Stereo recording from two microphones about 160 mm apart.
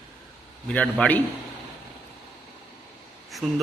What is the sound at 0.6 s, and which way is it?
Speech, 5° left (ahead or behind).